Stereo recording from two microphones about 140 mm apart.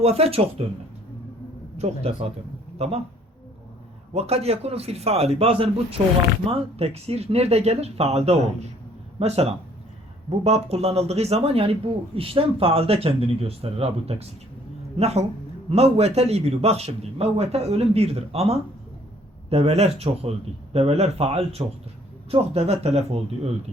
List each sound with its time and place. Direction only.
0.0 s a man's voice: 45° right (ahead or behind)
1.8 s a man's voice: 45° right (ahead or behind)
4.1 s a man's voice: 45° right (ahead or behind)